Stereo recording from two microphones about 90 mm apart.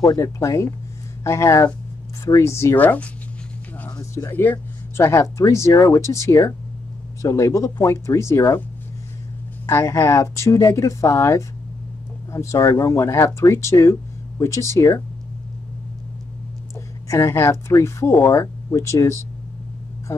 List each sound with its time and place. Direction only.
0.0 s speech: 40° left (ahead or behind)
2.8 s speech: 20° left (ahead or behind)
3.9 s a sound: 40° left (ahead or behind)
4.3 s speech: 25° left (ahead or behind)
9.7 s speech: 30° left (ahead or behind)
17.1 s a woman's voice: 30° left (ahead or behind)